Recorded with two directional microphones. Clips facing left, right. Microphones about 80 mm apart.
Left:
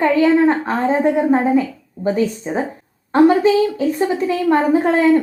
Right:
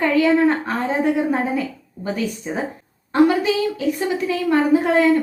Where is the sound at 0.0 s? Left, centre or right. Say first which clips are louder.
Left 3 dB; left.